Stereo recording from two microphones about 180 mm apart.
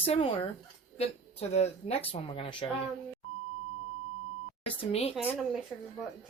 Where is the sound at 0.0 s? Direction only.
35° left (ahead or behind).